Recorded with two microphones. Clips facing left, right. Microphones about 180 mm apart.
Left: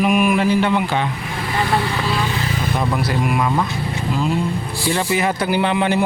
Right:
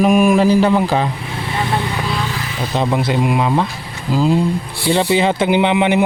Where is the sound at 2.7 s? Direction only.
25° right (ahead or behind).